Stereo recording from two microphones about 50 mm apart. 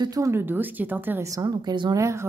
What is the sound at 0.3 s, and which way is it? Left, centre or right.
Speech, right.